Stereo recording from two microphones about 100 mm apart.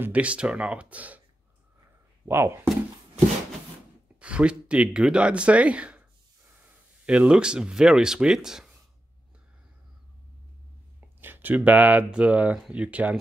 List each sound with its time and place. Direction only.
0.0 s speech: 15° right (ahead or behind)
2.2 s speech: 25° right (ahead or behind)
4.2 s speech: 10° right (ahead or behind)
11.1 s speech: 20° right (ahead or behind)